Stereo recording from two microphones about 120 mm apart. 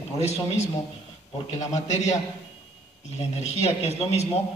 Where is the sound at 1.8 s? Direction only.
70° left (ahead or behind).